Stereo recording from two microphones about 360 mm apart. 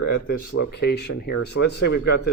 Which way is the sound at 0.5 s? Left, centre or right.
Left.